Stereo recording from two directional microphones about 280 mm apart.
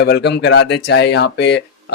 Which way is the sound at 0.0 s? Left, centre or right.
Left.